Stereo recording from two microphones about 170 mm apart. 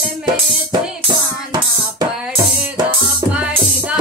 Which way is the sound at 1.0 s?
25° right (ahead or behind).